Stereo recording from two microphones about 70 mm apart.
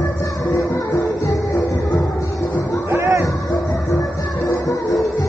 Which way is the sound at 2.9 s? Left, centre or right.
Right.